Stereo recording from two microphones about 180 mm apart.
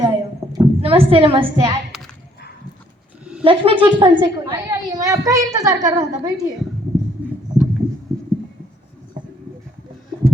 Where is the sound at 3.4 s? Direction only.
30° right (ahead or behind).